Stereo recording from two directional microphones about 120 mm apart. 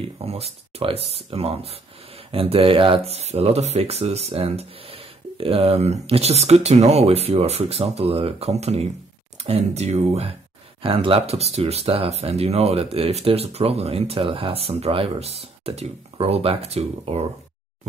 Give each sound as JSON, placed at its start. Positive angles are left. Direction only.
{"t": 0.2, "sound": "speech", "side_deg": -55}
{"t": 10.8, "sound": "speech", "side_deg": -50}